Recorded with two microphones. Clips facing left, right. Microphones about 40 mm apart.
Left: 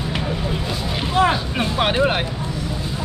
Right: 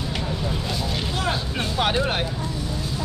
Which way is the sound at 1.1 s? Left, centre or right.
Left.